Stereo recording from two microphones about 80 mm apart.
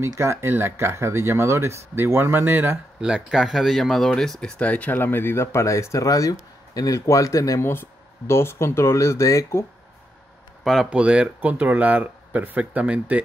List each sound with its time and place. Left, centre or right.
0.0 s speech: right
3.0 s speech: centre; by 7.6 s left
7.6 s speech: left
10.6 s speech: centre
10.9 s speech: centre